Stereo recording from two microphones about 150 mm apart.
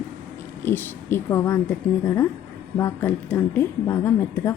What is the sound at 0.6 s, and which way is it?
A woman's voice, 15° left (ahead or behind).